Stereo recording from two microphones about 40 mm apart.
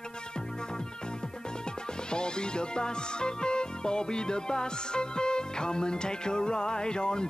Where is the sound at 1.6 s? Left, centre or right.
Left.